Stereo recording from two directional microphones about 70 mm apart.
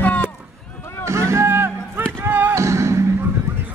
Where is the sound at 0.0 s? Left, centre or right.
Left.